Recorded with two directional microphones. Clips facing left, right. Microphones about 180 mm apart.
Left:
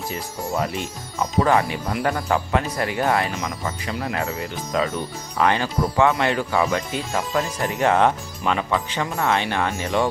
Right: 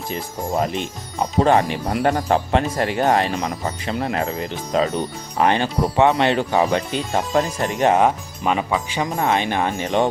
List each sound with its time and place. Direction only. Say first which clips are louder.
0.1 s speech: right 5 dB; 20° right (ahead or behind)
3.1 s speech: right 3 dB; 40° right (ahead or behind); by 10.1 s 20° right (ahead or behind)